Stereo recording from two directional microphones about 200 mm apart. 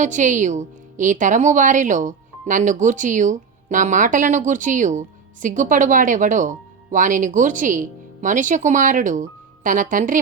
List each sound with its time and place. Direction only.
0.0 s a woman's voice: 40° right (ahead or behind)